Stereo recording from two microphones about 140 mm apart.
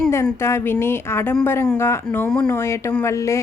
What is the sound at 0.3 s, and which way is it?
A woman's voice, 20° left (ahead or behind).